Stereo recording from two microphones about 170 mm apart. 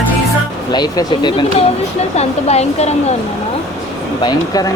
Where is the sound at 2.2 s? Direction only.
40° left (ahead or behind).